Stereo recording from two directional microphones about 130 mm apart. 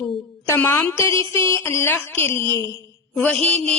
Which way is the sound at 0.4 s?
20° left (ahead or behind).